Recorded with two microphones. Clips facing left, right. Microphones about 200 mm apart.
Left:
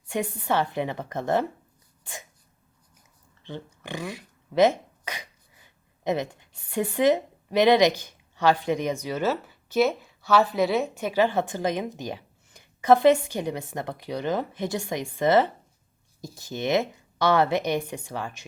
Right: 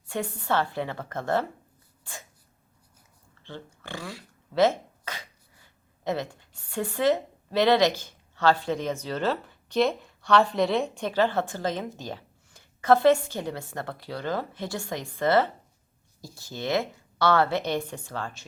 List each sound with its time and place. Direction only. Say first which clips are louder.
0.1 s a woman's voice: left 2 dB; 15° left (ahead or behind)
3.4 s a woman's voice: left 3 dB; 15° left (ahead or behind)